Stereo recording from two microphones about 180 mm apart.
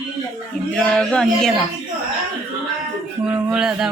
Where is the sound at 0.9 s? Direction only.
5° left (ahead or behind).